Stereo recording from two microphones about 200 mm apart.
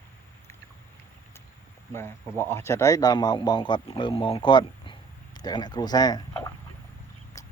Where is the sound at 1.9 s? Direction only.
10° left (ahead or behind).